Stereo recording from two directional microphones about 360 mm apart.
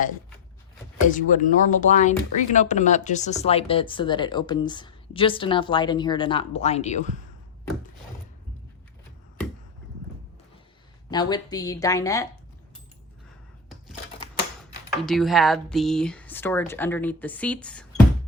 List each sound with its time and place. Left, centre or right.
1.0 s speech: left
11.1 s speech: centre
15.0 s speech: centre